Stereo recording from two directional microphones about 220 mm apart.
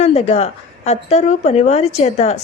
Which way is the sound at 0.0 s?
30° left (ahead or behind).